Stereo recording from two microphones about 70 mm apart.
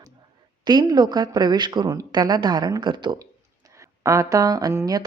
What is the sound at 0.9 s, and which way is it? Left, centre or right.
Speech, right.